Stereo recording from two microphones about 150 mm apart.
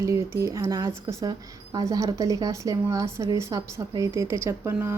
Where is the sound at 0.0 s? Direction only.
20° right (ahead or behind).